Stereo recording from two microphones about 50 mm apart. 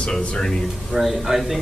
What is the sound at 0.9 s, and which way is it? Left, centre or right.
Speech, centre.